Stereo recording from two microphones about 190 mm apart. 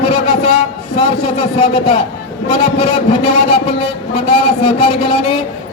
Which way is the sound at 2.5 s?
25° left (ahead or behind).